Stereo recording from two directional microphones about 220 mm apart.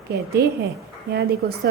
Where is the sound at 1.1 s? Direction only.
45° right (ahead or behind).